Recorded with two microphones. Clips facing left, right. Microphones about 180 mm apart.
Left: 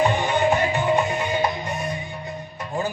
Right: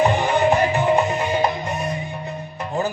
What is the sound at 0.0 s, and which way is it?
Music, 40° right (ahead or behind).